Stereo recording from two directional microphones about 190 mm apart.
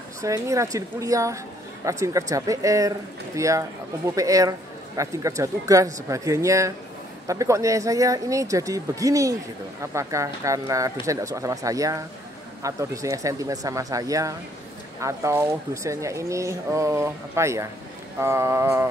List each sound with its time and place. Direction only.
0.2 s speech: 15° right (ahead or behind)